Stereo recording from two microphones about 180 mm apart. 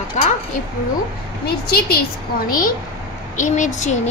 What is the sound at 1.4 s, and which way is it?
A woman's voice, 60° left (ahead or behind).